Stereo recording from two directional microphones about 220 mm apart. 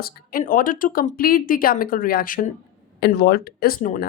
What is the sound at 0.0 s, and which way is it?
Speech, 40° left (ahead or behind).